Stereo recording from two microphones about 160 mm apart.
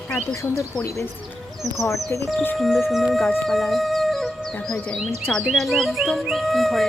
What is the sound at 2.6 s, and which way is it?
Speech, centre (ahead or behind).